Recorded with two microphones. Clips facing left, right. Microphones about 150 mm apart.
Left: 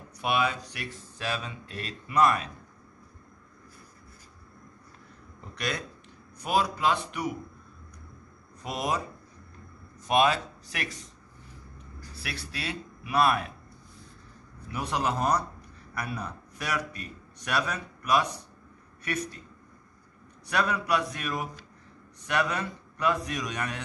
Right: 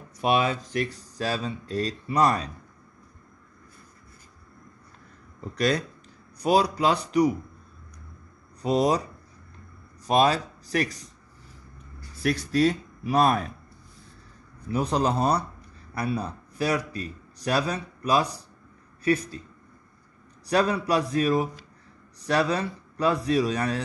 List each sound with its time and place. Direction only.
0.2 s speech: 40° right (ahead or behind)
5.6 s speech: 40° right (ahead or behind)
8.6 s speech: 35° right (ahead or behind)
10.0 s speech: 35° right (ahead or behind)
12.2 s speech: 45° right (ahead or behind)
14.7 s a man's voice: 35° right (ahead or behind)
20.4 s speech: 35° right (ahead or behind)